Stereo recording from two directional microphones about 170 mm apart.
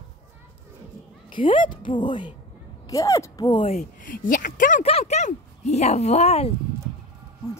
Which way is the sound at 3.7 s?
55° left (ahead or behind).